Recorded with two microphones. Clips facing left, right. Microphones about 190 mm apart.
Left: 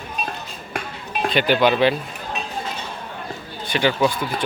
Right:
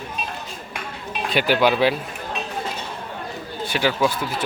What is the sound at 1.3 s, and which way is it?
Speech, 10° right (ahead or behind).